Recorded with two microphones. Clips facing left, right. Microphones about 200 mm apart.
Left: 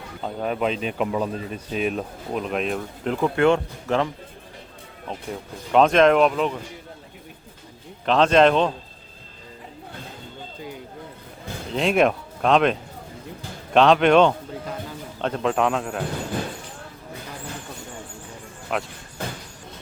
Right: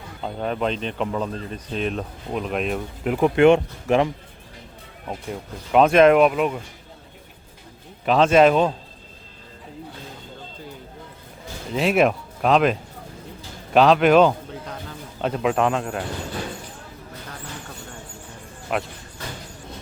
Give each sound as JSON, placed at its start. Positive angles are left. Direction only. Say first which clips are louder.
{"t": 0.2, "sound": "speech", "louder": "even", "side_deg": 5}
{"t": 3.2, "sound": "speech", "louder": "right 4 dB", "side_deg": -20}
{"t": 5.3, "sound": "speech", "louder": "even", "side_deg": -5}
{"t": 8.0, "sound": "speech", "louder": "right 1 dB", "side_deg": -5}
{"t": 11.7, "sound": "speech", "louder": "right 1 dB", "side_deg": -5}
{"t": 13.7, "sound": "speech", "louder": "right 1 dB", "side_deg": -5}
{"t": 18.7, "sound": "speech", "louder": "right 1 dB", "side_deg": 0}